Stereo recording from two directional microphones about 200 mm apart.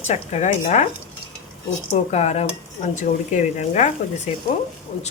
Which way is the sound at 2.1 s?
30° left (ahead or behind).